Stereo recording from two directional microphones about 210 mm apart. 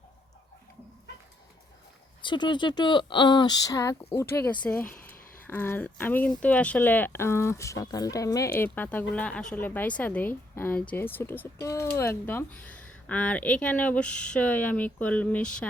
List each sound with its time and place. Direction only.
2.2 s speech: 20° left (ahead or behind); by 15.7 s 5° left (ahead or behind)